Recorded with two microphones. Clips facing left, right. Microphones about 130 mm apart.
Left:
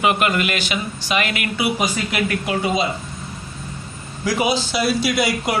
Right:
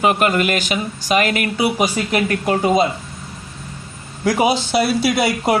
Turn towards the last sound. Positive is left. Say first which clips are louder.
# right 3 dB
turn(degrees=-55)  # may be behind; listen again after turning